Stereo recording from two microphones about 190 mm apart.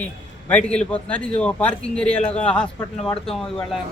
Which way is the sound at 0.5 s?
5° left (ahead or behind).